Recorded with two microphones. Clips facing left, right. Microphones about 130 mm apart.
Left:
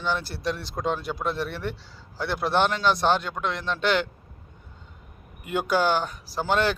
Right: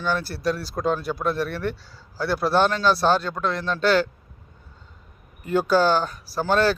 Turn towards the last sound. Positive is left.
turn(degrees=15)  # may be behind; listen again after turning